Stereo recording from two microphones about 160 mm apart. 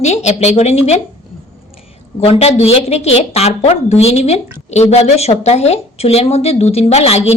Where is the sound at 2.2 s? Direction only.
40° left (ahead or behind).